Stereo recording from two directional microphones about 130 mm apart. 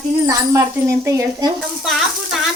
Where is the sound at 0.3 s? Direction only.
20° right (ahead or behind).